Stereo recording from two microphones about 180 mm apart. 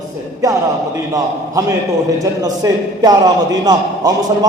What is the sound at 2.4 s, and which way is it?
Speech, 20° right (ahead or behind).